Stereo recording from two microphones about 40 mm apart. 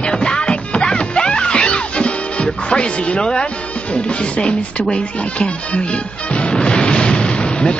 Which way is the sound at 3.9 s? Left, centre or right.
Left.